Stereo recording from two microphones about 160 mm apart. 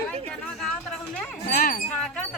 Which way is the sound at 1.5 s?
60° left (ahead or behind).